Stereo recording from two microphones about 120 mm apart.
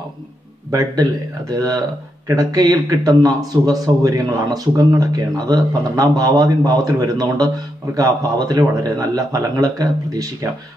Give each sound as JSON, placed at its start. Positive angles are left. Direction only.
{"t": 0.7, "sound": "a man's voice", "side_deg": -30}